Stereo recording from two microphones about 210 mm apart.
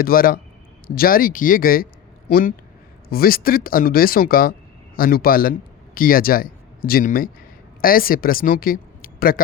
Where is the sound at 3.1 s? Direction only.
45° left (ahead or behind).